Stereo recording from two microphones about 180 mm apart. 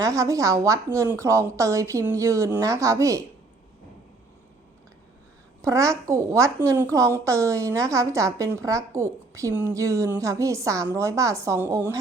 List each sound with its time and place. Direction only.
0.0 s a woman's voice: 20° right (ahead or behind)
5.6 s a woman's voice: 15° right (ahead or behind)